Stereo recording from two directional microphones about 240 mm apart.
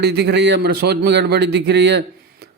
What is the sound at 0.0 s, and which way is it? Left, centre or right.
A man's voice, right.